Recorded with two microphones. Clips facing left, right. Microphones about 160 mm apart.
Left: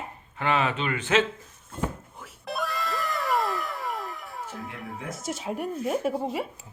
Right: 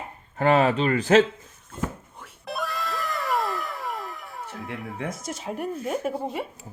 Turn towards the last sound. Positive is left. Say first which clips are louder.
# left 1 dB
turn(degrees=0)  # may be behind; listen again after turning